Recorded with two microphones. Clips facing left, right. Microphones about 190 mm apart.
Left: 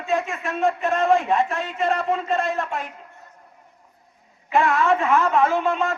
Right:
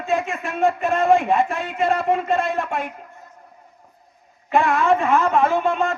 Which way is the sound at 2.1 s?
55° right (ahead or behind).